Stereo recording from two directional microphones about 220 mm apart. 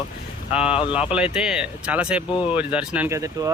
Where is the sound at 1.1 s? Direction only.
5° right (ahead or behind).